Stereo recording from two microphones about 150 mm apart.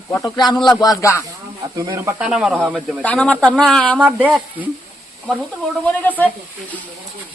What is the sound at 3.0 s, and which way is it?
Speech, 10° left (ahead or behind).